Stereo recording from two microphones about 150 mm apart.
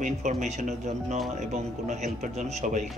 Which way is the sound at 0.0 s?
55° right (ahead or behind).